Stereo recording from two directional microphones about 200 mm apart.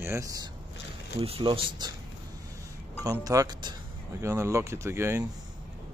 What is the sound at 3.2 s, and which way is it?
Speech, 20° right (ahead or behind).